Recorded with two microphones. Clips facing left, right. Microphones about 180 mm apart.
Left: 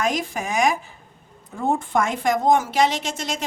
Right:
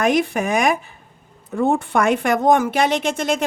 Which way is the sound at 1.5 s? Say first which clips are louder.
Right 4 dB; 70° right (ahead or behind).